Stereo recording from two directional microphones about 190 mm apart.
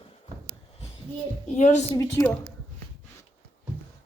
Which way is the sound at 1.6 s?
40° left (ahead or behind).